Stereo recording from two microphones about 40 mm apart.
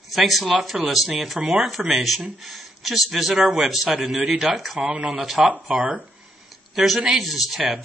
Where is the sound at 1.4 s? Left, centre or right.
Centre.